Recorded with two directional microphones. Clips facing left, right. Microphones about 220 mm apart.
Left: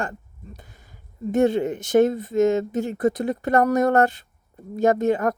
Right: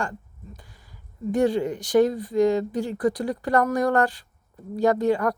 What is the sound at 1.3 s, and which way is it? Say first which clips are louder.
Speech: left 2 dB; 25° left (ahead or behind).